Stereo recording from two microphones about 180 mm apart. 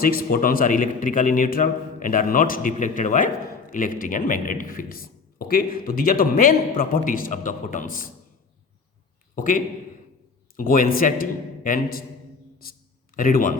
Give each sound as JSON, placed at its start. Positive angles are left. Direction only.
{"t": 0.0, "sound": "a man's voice", "side_deg": 55}
{"t": 9.3, "sound": "a man's voice", "side_deg": 50}
{"t": 13.1, "sound": "a man's voice", "side_deg": 50}